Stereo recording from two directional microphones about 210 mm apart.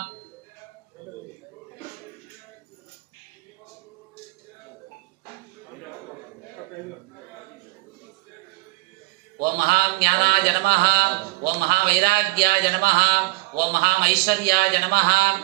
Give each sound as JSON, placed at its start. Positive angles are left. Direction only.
{"t": 9.4, "sound": "mantra", "side_deg": -45}